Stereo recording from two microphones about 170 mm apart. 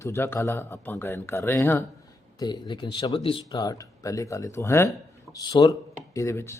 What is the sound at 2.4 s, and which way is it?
Speech, 25° left (ahead or behind).